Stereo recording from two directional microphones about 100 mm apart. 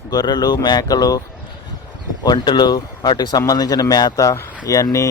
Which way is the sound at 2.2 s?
45° left (ahead or behind).